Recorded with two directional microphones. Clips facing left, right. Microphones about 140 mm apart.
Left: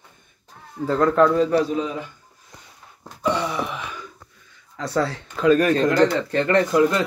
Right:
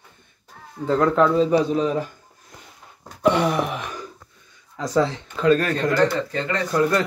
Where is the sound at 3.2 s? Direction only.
65° right (ahead or behind).